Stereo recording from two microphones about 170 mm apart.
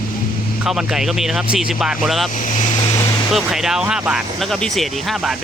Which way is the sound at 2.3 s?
50° left (ahead or behind).